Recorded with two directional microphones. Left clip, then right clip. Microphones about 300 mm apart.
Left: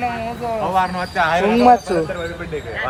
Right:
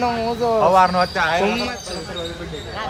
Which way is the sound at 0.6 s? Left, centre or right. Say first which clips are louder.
Right 5 dB; right.